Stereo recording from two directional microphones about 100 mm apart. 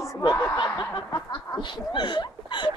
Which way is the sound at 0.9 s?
50° left (ahead or behind).